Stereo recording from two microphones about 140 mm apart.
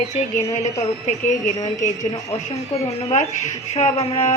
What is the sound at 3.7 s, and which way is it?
Speech, 50° left (ahead or behind).